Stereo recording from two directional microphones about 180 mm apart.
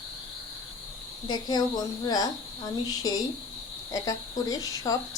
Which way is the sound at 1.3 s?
25° left (ahead or behind).